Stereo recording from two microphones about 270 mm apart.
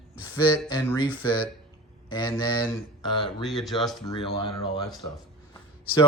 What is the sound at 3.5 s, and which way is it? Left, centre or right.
Speech, centre.